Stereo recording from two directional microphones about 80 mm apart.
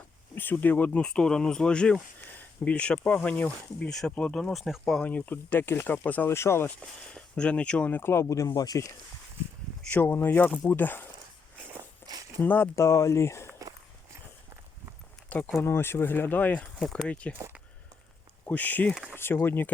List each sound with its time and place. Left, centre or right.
0.3 s speech: left
1.0 s speech: centre
4.5 s speech: centre
5.0 s speech: centre
6.3 s speech: left
6.7 s speech: centre; by 8.8 s left
9.8 s speech: left
12.0 s a sound: left
12.4 s speech: left
12.7 s speech: left
15.5 s speech: left; by 17.3 s centre
18.4 s speech: left